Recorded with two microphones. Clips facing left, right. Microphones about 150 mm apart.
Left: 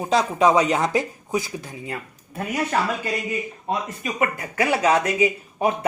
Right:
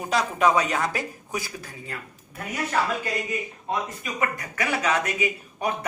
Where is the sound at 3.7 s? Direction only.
25° left (ahead or behind).